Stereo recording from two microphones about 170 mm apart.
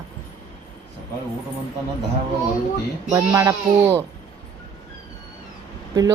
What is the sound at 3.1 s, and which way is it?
Speech, 20° right (ahead or behind).